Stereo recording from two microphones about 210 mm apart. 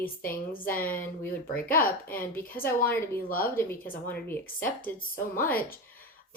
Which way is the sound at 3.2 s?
45° left (ahead or behind).